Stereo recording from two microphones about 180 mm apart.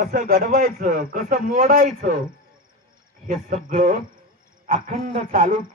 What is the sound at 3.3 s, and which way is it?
A man's voice, 50° right (ahead or behind).